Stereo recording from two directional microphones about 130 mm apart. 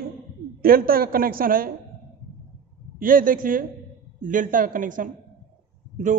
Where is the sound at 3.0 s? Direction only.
90° right.